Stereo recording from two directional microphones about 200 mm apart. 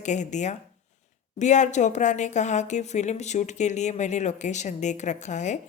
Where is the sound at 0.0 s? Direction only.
35° left (ahead or behind).